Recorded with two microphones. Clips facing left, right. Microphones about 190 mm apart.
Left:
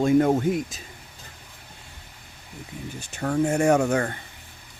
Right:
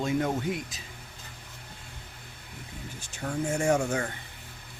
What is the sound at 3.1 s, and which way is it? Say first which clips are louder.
Speech: left 7 dB; 65° left (ahead or behind).